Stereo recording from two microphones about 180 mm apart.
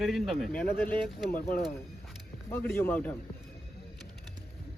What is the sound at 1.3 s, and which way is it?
Speech, 55° left (ahead or behind).